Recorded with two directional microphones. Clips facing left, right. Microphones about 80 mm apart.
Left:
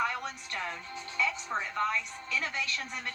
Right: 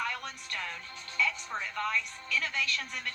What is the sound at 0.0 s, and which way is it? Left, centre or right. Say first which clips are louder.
Music: left 4 dB; left.